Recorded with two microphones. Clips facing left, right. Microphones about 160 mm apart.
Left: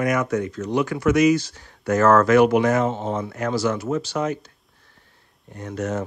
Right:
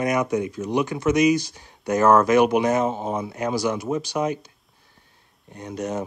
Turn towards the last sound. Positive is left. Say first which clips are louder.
# left 1 dB
turn(degrees=-15)  # may be behind; listen again after turning